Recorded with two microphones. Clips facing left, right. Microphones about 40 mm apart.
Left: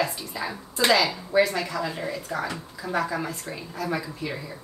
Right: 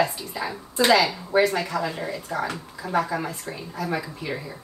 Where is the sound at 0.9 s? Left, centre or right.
Centre.